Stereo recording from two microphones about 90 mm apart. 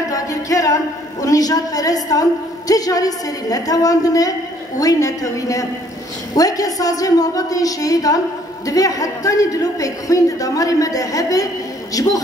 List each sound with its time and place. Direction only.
0.1 s music: 40° left (ahead or behind)
1.2 s a woman's voice: 40° left (ahead or behind)